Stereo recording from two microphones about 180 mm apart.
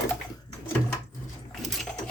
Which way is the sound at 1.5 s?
Centre (ahead or behind).